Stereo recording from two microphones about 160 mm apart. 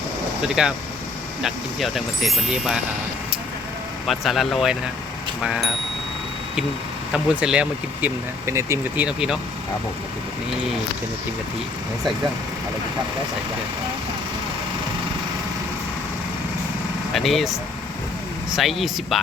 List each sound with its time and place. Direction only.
0.4 s speech: 5° right (ahead or behind)
4.0 s speech: centre (ahead or behind)
7.1 s speech: 5° right (ahead or behind)
8.4 s speech: 15° right (ahead or behind)
9.0 s speech: 5° right (ahead or behind)
17.2 s speech: centre (ahead or behind)
18.5 s speech: centre (ahead or behind)